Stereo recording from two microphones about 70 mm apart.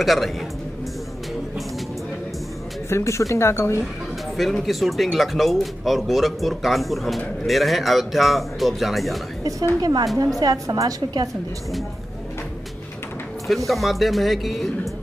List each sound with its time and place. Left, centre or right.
0.0 s speech: centre
2.9 s a woman's voice: left
4.4 s speech: centre
9.8 s a woman's voice: right
13.7 s speech: centre